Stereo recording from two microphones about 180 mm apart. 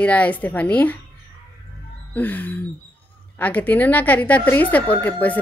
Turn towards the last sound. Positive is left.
turn(degrees=10)  # may be behind; listen again after turning